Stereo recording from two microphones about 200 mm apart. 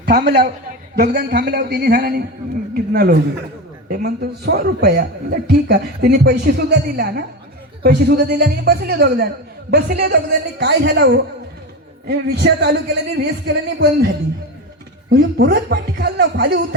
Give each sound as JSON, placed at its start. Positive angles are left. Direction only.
{"t": 0.0, "sound": "a woman's voice", "side_deg": -55}
{"t": 15.1, "sound": "a man's voice", "side_deg": -50}